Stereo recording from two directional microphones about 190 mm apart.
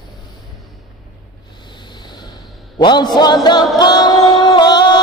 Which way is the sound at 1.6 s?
25° left (ahead or behind).